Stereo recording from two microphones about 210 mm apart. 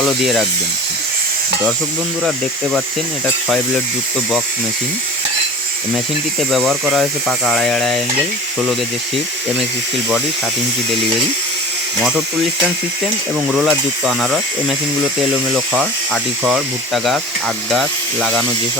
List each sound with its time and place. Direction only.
0.0 s speech: centre (ahead or behind)
6.7 s speech: centre (ahead or behind)
13.5 s speech: 5° right (ahead or behind)